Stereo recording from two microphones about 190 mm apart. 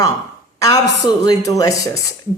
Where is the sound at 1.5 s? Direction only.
20° left (ahead or behind).